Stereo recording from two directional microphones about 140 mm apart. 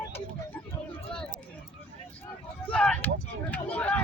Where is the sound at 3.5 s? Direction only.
10° left (ahead or behind).